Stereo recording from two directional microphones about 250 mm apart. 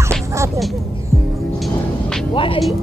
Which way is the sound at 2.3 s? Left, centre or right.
Left.